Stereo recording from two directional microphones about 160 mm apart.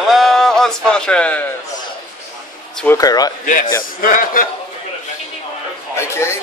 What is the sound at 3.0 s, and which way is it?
Speech, 25° left (ahead or behind).